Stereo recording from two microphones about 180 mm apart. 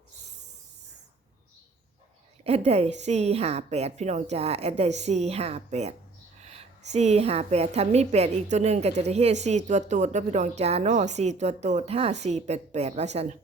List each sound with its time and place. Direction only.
2.4 s a woman's voice: 35° right (ahead or behind)